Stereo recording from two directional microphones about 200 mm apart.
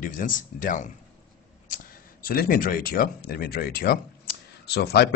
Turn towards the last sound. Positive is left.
turn(degrees=55)  # may be behind; listen again after turning